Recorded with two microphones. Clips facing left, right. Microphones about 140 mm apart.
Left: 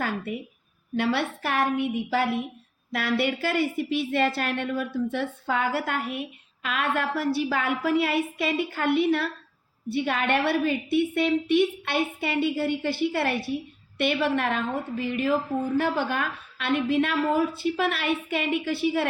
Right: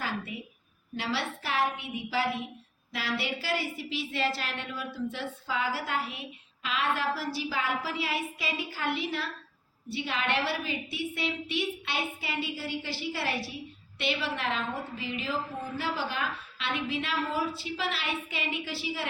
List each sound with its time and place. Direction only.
0.9 s a woman's voice: 55° left (ahead or behind)